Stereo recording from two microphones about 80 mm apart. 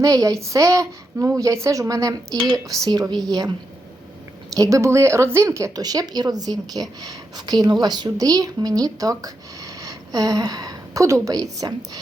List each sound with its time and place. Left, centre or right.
0.0 s a woman's voice: right
4.5 s a woman's voice: right
5.8 s a woman's voice: right